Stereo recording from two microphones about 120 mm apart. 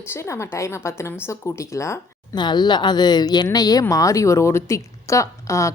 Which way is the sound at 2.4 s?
40° left (ahead or behind).